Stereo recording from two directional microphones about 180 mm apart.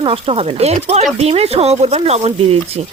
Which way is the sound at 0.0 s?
30° right (ahead or behind).